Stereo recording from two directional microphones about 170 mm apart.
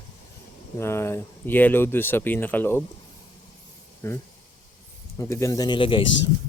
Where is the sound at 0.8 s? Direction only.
15° left (ahead or behind).